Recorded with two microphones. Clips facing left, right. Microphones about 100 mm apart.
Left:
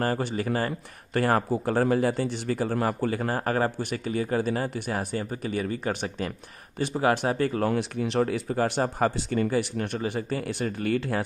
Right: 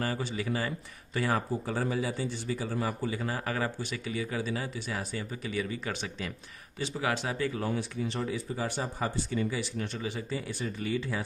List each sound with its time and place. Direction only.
0.0 s speech: 50° left (ahead or behind)
7.6 s speech: 70° left (ahead or behind)